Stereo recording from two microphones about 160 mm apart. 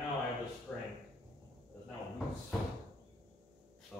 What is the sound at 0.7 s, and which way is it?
Drawer open or close, 5° left (ahead or behind).